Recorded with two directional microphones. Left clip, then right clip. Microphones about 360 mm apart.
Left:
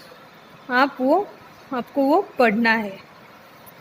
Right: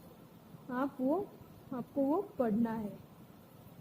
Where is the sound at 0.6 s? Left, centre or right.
Left.